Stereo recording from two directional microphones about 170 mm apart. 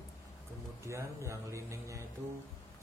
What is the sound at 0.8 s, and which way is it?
A man's voice, 15° right (ahead or behind).